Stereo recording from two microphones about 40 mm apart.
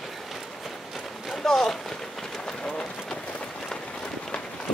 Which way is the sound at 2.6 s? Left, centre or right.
Left.